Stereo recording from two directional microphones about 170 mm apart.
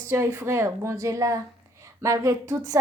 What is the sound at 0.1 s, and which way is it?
A woman's voice, 15° right (ahead or behind).